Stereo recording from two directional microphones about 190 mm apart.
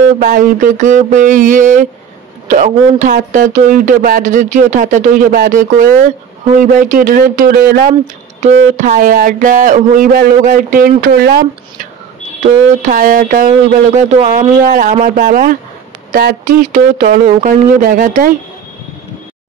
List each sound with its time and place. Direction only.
0.2 s speech: 45° right (ahead or behind)
8.4 s speech: 40° right (ahead or behind); by 11.9 s 55° right (ahead or behind)
12.4 s speech: 40° right (ahead or behind)